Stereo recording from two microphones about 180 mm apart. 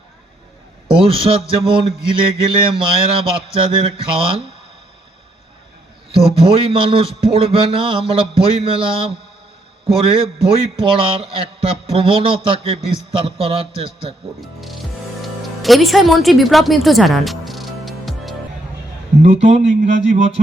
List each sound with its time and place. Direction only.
1.0 s a man's voice: 30° right (ahead or behind)
6.4 s a man's voice: 30° right (ahead or behind)
14.4 s music: centre (ahead or behind)
19.2 s a man's voice: 40° right (ahead or behind)